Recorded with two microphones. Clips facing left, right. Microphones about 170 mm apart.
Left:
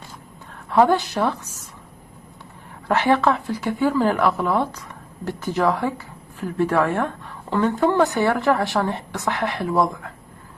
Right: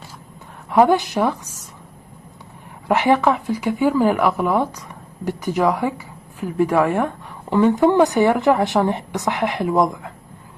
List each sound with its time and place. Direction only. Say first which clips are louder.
0.7 s speech: right 2 dB; 15° right (ahead or behind)
2.9 s speech: right 2 dB; 15° right (ahead or behind)